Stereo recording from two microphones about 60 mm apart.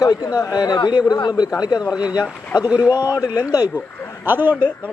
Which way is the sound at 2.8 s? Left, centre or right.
Left.